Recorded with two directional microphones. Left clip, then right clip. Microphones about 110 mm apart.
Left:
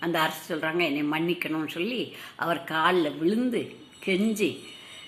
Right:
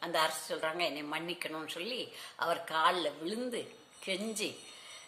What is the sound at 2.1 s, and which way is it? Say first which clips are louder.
A woman's voice: left 5 dB; centre (ahead or behind).